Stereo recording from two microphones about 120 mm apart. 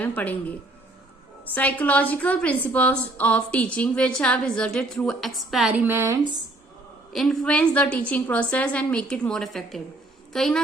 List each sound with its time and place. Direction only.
0.0 s a woman's voice: 15° left (ahead or behind)
1.5 s a woman's voice: 15° left (ahead or behind)
5.8 s speech: 20° right (ahead or behind)
7.1 s a woman's voice: 5° left (ahead or behind)